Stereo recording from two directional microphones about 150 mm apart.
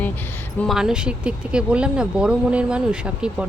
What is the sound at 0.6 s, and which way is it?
Speech, centre (ahead or behind).